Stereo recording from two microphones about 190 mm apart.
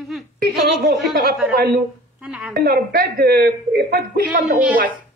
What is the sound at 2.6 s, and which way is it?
A woman's voice, 55° right (ahead or behind).